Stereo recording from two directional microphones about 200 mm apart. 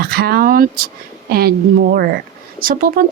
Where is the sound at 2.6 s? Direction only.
45° right (ahead or behind).